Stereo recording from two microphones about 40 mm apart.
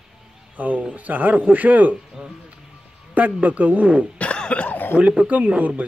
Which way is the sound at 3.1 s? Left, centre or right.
Right.